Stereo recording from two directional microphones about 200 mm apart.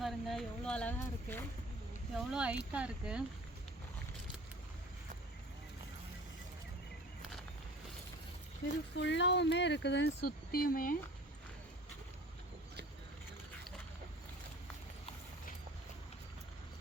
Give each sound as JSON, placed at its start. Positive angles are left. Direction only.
{"t": 0.0, "sound": "speech", "side_deg": 0}
{"t": 2.1, "sound": "speech", "side_deg": -5}
{"t": 9.0, "sound": "speech", "side_deg": 60}